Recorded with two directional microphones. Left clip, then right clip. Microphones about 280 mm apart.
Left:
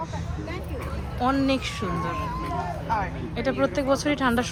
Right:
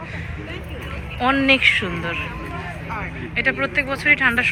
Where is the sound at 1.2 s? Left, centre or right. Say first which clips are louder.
Right 9 dB; centre.